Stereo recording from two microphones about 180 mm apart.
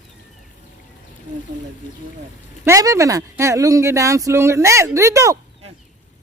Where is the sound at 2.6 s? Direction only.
15° right (ahead or behind).